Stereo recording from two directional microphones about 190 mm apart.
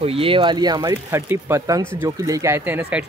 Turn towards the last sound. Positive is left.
turn(degrees=-10)  # may be behind; listen again after turning